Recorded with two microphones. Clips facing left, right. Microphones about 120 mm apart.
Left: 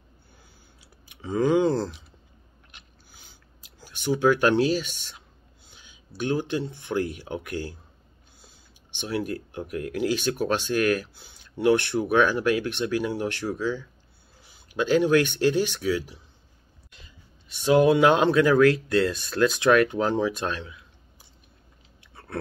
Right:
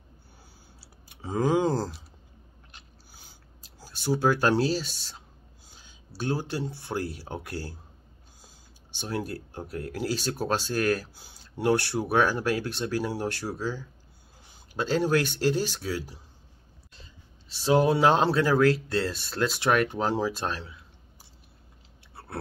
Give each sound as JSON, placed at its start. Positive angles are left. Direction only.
{"t": 1.0, "sound": "a sound", "side_deg": -40}
{"t": 6.8, "sound": "speech", "side_deg": -35}
{"t": 9.0, "sound": "speech", "side_deg": -35}
{"t": 22.1, "sound": "chewing", "side_deg": -30}